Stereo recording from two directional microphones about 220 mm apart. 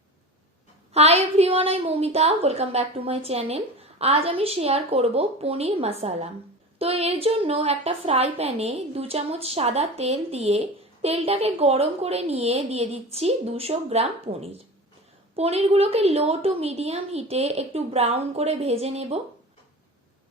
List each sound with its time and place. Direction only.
0.9 s a woman's voice: 30° right (ahead or behind)